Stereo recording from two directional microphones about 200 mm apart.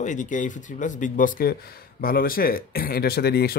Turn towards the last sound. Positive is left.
turn(degrees=50)  # may be behind; listen again after turning